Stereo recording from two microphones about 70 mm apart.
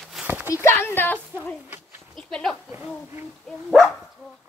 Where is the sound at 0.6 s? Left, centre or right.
Left.